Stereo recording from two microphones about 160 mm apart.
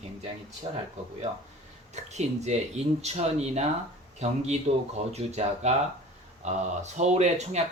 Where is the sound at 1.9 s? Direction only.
45° right (ahead or behind).